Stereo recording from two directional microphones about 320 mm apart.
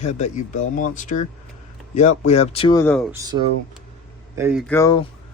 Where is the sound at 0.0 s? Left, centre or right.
Left; by 3.1 s centre.